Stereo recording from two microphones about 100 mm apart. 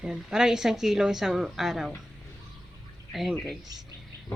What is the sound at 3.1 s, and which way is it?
Speech, centre (ahead or behind).